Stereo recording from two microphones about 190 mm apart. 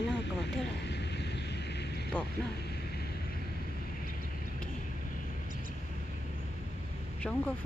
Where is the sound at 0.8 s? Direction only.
60° left (ahead or behind).